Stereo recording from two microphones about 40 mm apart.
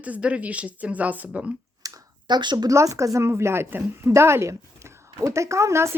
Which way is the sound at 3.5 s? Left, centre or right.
Right.